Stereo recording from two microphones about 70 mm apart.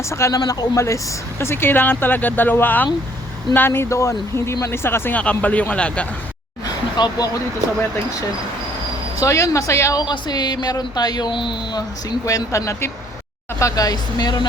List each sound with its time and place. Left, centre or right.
0.0 s speech: left
0.4 s speech: left
1.4 s speech: left
5.1 s speech: left
6.9 s speech: left
9.1 s speech: left
9.9 s speech: left
12.2 s speech: left